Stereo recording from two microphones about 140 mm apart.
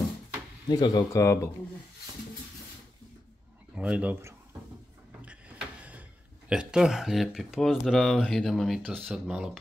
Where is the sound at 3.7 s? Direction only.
10° right (ahead or behind).